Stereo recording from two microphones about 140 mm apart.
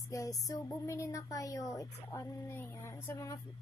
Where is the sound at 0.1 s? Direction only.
25° left (ahead or behind).